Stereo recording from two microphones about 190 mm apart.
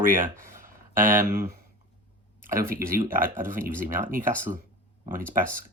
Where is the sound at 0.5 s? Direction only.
45° right (ahead or behind).